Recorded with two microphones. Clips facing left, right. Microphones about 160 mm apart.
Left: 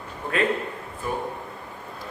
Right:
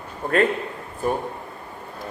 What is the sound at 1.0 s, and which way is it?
Speech, 45° right (ahead or behind).